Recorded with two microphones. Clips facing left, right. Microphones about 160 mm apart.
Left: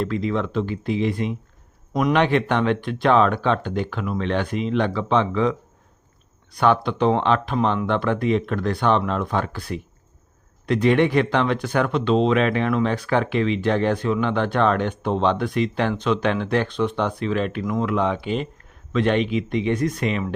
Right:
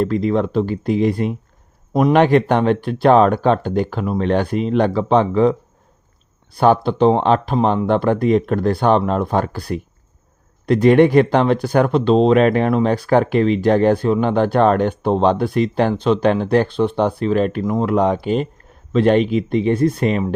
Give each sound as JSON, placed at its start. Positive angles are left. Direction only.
{"t": 0.0, "sound": "speech", "side_deg": -40}